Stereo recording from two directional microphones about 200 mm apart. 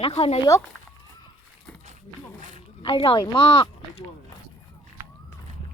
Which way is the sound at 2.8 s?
25° left (ahead or behind).